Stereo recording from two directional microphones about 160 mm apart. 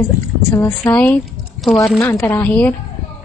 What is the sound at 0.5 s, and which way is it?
Speech, 20° left (ahead or behind).